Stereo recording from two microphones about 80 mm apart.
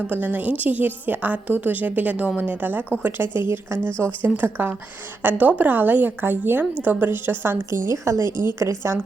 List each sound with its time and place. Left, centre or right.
0.1 s a woman's voice: right